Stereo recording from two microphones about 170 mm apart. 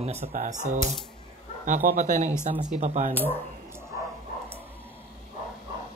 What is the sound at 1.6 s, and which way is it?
A man's voice, 55° right (ahead or behind).